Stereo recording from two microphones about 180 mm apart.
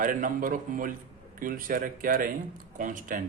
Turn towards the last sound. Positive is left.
turn(degrees=-45)  # may be behind; listen again after turning